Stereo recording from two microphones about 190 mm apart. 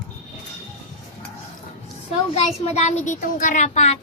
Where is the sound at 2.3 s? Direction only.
35° left (ahead or behind).